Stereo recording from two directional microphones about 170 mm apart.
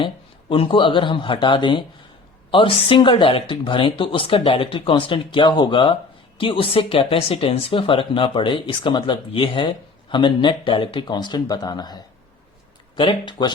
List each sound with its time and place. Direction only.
0.0 s speech: 30° left (ahead or behind)
13.0 s speech: 30° left (ahead or behind)